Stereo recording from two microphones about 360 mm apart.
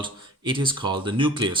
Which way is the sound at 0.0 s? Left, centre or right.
Centre.